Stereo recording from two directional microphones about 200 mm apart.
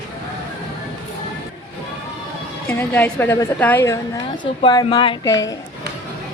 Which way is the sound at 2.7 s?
10° left (ahead or behind).